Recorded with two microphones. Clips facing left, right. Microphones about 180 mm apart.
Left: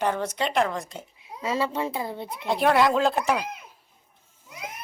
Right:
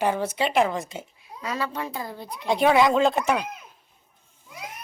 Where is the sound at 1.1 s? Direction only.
25° left (ahead or behind).